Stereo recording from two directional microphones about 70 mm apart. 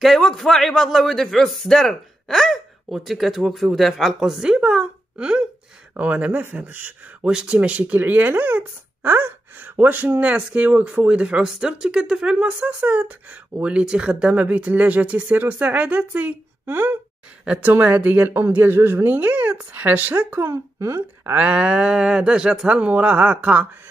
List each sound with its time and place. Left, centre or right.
0.0 s speech: centre; by 7.2 s right
7.2 s speech: centre
20.4 s a woman's voice: right
21.4 s speech: centre